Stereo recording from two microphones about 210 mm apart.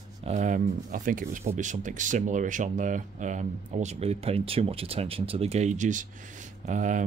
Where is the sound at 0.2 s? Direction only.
35° right (ahead or behind).